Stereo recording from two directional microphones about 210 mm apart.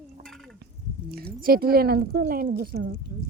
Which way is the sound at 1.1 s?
45° right (ahead or behind).